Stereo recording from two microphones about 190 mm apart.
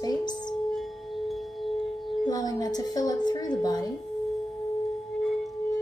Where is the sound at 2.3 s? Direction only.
20° left (ahead or behind).